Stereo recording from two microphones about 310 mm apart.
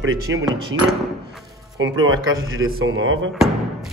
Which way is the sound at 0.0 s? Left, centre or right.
Right.